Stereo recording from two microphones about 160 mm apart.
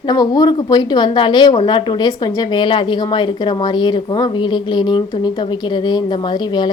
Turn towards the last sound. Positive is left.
turn(degrees=30)  # may be behind; listen again after turning